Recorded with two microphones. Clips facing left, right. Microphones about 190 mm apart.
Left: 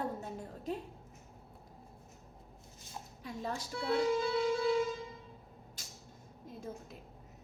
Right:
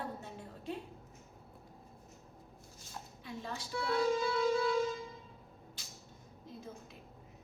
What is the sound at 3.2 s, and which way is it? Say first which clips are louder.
Speech: left 4 dB; 40° left (ahead or behind).